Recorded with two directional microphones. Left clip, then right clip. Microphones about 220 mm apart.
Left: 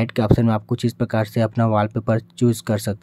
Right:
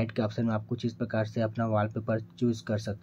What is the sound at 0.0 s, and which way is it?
Speech, 30° left (ahead or behind).